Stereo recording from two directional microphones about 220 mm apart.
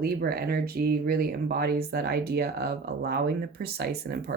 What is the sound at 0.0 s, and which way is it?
Speech, 45° right (ahead or behind).